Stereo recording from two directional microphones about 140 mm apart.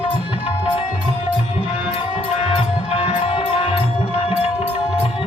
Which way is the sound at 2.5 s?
45° left (ahead or behind).